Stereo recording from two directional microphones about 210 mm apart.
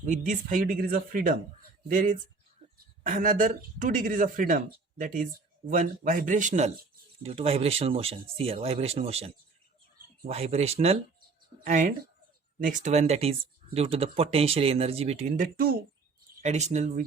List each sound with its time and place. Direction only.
0.0 s speech: 35° right (ahead or behind)
16.4 s speech: 30° right (ahead or behind)